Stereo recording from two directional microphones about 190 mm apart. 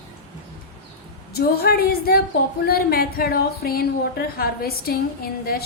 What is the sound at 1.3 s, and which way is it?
A woman's voice, 55° left (ahead or behind).